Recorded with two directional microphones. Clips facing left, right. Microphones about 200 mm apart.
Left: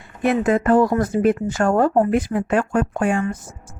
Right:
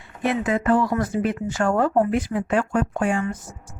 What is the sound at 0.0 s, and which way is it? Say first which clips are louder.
Speech: left 5 dB; 50° left (ahead or behind).